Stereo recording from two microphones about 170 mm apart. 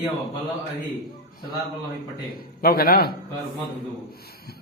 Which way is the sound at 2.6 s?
60° left (ahead or behind).